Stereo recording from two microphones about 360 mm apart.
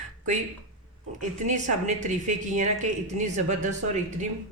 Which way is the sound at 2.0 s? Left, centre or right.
Centre.